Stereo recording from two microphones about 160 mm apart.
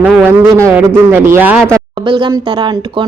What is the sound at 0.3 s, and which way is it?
A woman's voice, 15° right (ahead or behind).